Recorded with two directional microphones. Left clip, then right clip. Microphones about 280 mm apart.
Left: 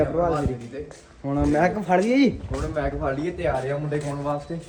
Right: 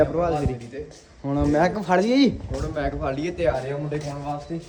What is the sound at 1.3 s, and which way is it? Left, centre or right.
Speech, right.